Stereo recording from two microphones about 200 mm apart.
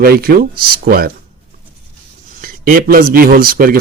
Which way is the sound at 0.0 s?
50° right (ahead or behind).